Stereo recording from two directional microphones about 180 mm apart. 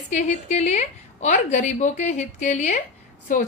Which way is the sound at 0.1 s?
40° left (ahead or behind).